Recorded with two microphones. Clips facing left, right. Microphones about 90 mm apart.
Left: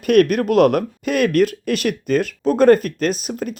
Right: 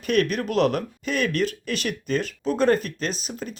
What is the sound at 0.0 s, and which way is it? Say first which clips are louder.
Speech: left 8 dB; 55° left (ahead or behind).